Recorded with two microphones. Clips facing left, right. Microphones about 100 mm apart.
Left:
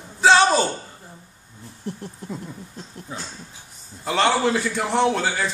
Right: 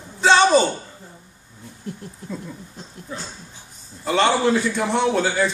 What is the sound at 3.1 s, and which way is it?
Speech, 15° left (ahead or behind).